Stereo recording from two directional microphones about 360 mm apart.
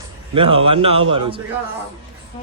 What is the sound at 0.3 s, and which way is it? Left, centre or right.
Speech, centre.